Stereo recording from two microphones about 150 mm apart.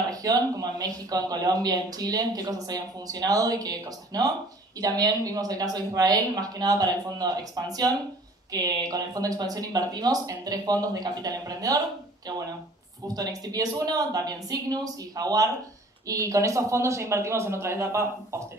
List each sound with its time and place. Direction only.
0.1 s speech: 25° right (ahead or behind)